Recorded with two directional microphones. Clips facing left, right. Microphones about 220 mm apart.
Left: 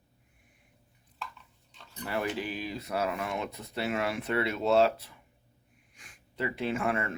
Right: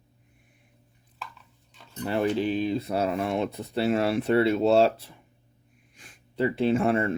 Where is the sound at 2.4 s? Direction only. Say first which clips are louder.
Right 10 dB; 25° right (ahead or behind).